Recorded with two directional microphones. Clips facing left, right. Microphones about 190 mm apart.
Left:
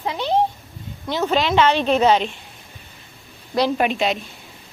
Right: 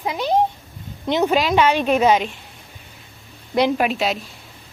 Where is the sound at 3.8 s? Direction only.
Centre (ahead or behind).